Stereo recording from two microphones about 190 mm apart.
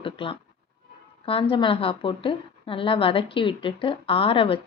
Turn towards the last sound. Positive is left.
turn(degrees=30)  # may be behind; listen again after turning